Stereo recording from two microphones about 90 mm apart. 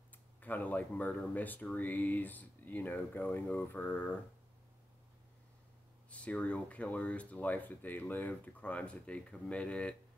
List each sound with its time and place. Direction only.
0.4 s speech: 20° left (ahead or behind)
6.0 s speech: 15° left (ahead or behind)